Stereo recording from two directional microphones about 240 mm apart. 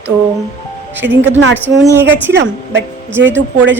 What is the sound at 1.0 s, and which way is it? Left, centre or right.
Speech, right.